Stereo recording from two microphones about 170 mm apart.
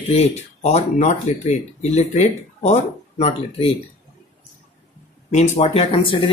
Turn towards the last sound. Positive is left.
turn(degrees=30)  # may be behind; listen again after turning